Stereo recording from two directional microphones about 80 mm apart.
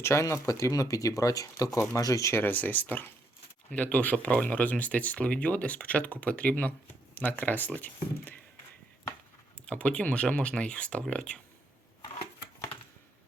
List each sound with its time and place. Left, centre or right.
0.0 s speech: left
2.3 s speech: left
9.6 s speech: centre